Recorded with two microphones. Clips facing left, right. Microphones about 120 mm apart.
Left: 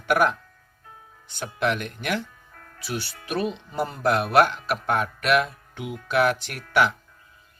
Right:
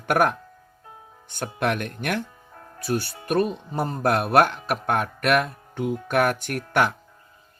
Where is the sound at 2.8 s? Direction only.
50° right (ahead or behind).